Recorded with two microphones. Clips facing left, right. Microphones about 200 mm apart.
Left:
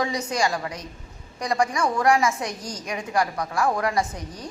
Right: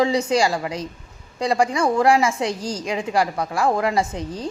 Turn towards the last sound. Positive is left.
turn(degrees=-25)  # may be behind; listen again after turning